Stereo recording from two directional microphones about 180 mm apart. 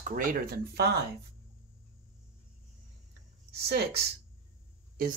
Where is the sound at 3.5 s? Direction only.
65° right (ahead or behind).